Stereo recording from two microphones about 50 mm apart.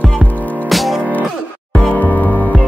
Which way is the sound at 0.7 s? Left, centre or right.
Centre.